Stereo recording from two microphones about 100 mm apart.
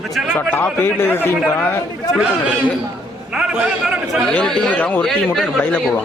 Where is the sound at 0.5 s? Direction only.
20° left (ahead or behind).